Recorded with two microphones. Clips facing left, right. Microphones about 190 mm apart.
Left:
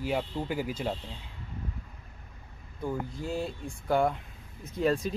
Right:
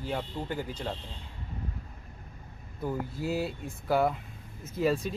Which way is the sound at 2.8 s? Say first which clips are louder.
Right 1 dB; 5° right (ahead or behind).